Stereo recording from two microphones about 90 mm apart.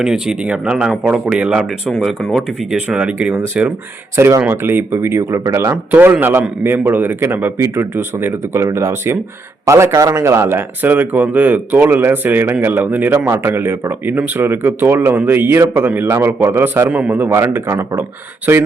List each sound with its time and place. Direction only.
0.0 s speech: 5° right (ahead or behind)
1.9 s speech: centre (ahead or behind)
2.7 s speech: 15° right (ahead or behind)
4.1 s speech: 30° right (ahead or behind)